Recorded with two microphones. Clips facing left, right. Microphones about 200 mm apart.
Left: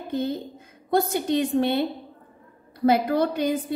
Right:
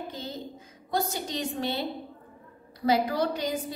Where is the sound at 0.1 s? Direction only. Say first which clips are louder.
Left 10 dB; 55° left (ahead or behind).